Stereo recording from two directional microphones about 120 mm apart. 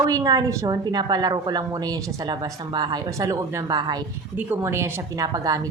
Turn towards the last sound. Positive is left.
turn(degrees=-30)  # may be behind; listen again after turning